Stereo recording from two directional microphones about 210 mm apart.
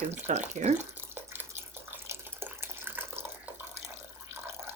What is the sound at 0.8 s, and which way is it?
Water, 10° right (ahead or behind).